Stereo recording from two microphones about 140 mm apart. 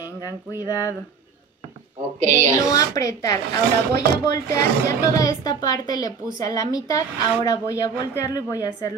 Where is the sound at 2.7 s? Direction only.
25° left (ahead or behind).